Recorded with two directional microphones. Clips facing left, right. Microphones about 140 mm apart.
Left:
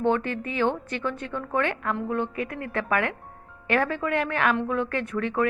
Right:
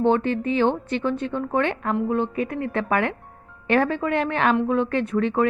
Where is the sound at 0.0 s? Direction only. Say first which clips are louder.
Right 4 dB; 25° right (ahead or behind).